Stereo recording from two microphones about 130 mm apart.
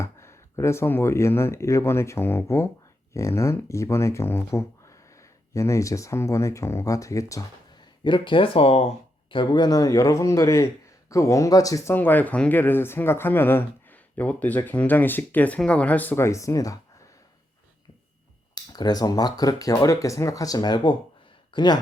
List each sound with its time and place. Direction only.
0.0 s speech: 20° left (ahead or behind); by 8.9 s 50° left (ahead or behind)
9.3 s speech: 35° left (ahead or behind)
18.5 s speech: 30° left (ahead or behind)